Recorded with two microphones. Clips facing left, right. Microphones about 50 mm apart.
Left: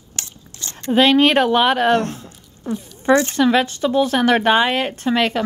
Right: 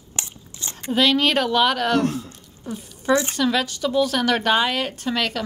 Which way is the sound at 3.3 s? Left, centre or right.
Left.